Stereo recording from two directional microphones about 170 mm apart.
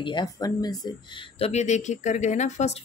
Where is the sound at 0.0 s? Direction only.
25° left (ahead or behind).